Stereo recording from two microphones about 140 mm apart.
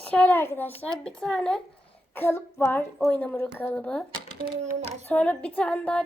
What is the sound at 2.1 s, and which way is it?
A woman's voice, 15° left (ahead or behind).